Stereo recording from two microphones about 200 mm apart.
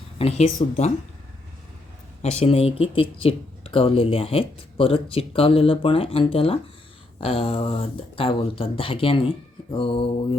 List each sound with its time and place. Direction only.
0.2 s speech: 30° left (ahead or behind)
2.2 s speech: 30° left (ahead or behind)